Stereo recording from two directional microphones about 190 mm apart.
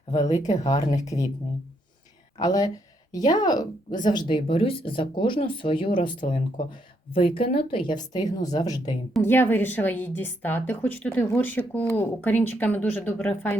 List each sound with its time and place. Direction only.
0.6 s a woman's voice: 20° left (ahead or behind)
2.4 s a woman's voice: 20° left (ahead or behind)